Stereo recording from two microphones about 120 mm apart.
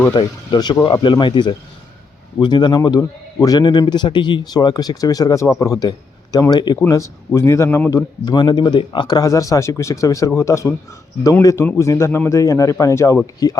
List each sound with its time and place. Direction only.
0.1 s a man's voice: 40° left (ahead or behind)
6.7 s speech: 25° left (ahead or behind)